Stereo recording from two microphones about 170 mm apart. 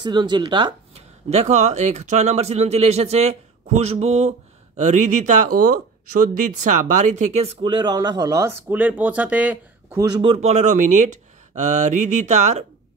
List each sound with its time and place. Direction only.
0.0 s speech: 25° right (ahead or behind)
1.3 s speech: 40° right (ahead or behind)
7.6 s speech: 25° right (ahead or behind); by 10.0 s 10° right (ahead or behind)
10.0 s speech: 30° right (ahead or behind)